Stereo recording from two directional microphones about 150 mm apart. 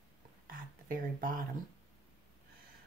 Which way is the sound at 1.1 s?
65° right (ahead or behind).